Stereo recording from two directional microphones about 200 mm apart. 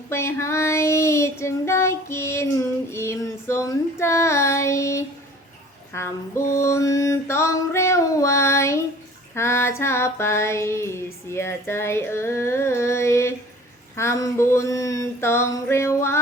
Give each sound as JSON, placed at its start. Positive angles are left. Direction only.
{"t": 0.1, "sound": "female singing", "side_deg": 15}